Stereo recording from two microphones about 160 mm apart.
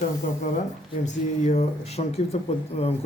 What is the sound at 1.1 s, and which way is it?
Speech, 45° left (ahead or behind).